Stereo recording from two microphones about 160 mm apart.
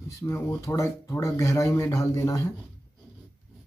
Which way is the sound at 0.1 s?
15° left (ahead or behind).